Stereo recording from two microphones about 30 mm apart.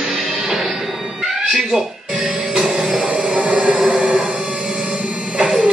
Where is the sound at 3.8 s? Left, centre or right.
Right.